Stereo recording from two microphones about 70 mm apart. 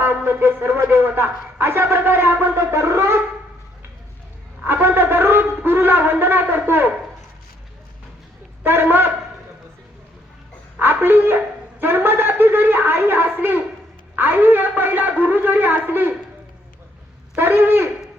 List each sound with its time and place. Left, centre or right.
0.3 s speech: right
4.6 s shofar: right
6.4 s a man's voice: right
8.6 s speech: right
10.8 s shofar: right
14.2 s a man's voice: right
17.3 s a sound: right